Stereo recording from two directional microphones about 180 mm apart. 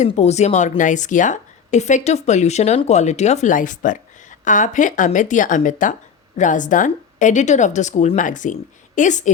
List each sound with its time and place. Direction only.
0.0 s a woman's voice: 40° left (ahead or behind)